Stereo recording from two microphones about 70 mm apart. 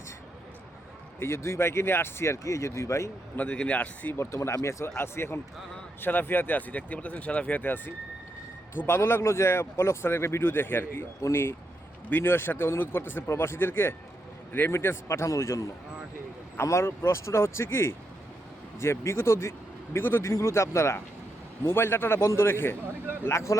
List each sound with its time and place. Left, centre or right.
1.2 s speech: left
3.3 s speech: centre
4.2 s speech: left